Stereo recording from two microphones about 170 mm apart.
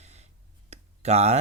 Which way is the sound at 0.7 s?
40° right (ahead or behind).